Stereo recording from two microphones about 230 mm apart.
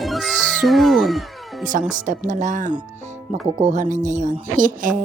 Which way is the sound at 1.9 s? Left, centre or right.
Right.